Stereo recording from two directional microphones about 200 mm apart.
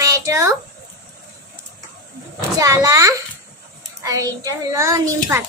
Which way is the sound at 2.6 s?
15° right (ahead or behind).